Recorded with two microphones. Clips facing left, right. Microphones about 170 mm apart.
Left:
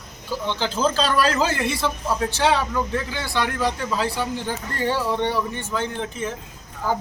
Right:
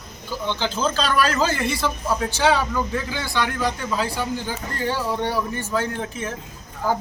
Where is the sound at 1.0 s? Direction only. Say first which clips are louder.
Right 1 dB; 30° left (ahead or behind).